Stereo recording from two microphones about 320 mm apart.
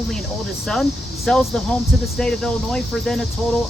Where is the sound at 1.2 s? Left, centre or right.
Centre.